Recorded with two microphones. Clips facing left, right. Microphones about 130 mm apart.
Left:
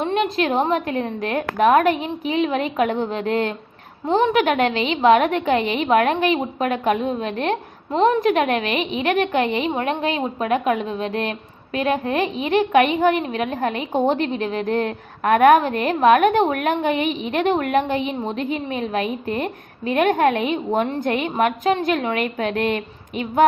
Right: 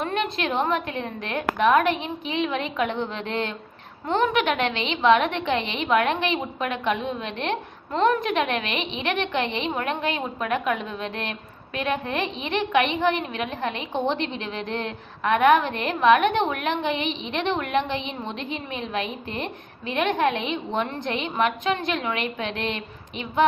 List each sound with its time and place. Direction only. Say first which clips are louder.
0.0 s a woman's voice: left 6 dB; 30° left (ahead or behind)